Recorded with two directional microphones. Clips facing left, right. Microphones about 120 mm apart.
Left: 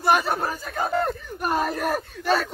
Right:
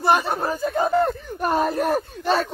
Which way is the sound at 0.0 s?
25° right (ahead or behind).